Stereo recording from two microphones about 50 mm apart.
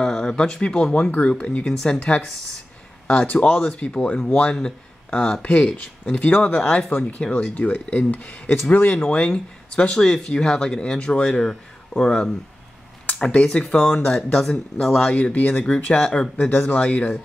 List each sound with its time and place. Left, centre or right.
0.0 s speech: centre
1.7 s speech: centre
2.0 s speech: left
7.8 s speech: centre
8.1 s speech: left
8.9 s speech: centre
11.4 s speech: centre
13.2 s speech: left